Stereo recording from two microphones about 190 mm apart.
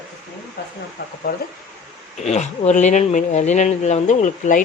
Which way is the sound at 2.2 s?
35° left (ahead or behind).